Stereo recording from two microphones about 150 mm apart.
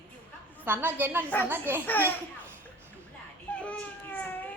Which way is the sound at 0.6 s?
15° right (ahead or behind).